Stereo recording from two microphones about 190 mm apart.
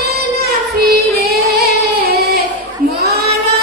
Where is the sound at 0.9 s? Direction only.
55° right (ahead or behind).